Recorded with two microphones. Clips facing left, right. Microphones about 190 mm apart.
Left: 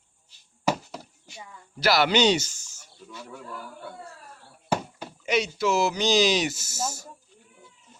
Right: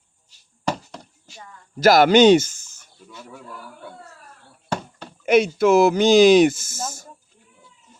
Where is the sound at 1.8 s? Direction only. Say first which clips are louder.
Right 8 dB; 45° right (ahead or behind).